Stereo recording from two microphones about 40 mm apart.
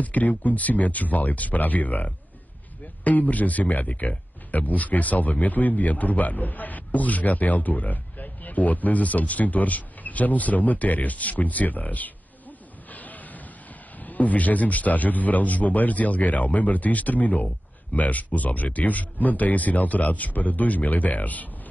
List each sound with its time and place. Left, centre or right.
0.0 s a man's voice: left